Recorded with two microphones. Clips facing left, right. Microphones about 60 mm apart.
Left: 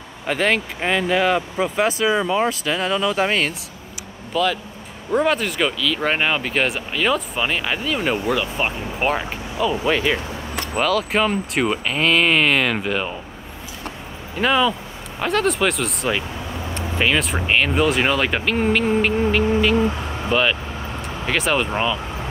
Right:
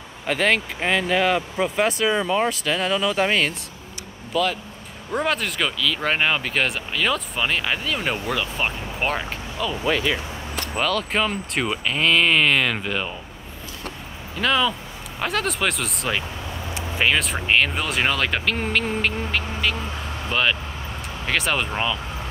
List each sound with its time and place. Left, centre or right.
0.3 s speech: centre
4.3 s speech: left
5.1 s speech: centre
10.8 s speech: centre
14.4 s speech: centre
15.1 s speech: centre